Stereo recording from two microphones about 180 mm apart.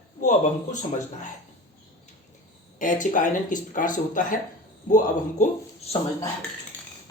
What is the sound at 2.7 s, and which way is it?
Speech, 45° left (ahead or behind).